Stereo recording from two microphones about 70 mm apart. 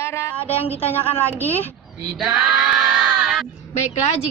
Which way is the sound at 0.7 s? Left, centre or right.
Left.